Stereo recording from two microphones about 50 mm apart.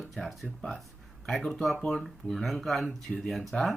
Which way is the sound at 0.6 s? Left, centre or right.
Centre.